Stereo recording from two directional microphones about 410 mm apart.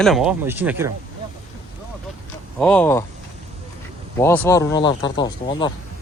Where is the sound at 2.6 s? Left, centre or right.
Centre.